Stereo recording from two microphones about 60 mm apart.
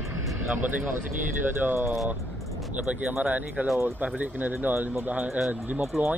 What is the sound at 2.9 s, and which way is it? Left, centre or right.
Speech, right.